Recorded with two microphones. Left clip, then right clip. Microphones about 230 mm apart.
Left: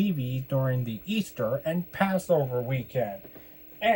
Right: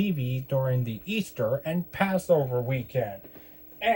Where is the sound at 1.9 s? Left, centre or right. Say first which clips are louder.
Right 2 dB; right.